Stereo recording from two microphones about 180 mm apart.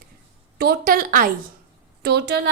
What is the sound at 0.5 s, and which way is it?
Speech, 60° right (ahead or behind).